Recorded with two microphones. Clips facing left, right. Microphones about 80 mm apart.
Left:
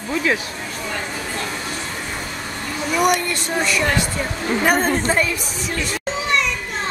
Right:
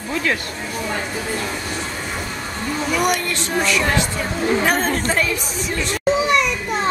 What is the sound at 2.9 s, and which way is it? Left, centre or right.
A woman's voice, centre.